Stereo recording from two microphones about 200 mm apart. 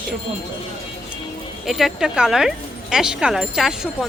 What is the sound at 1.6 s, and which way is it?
A woman's voice, centre (ahead or behind).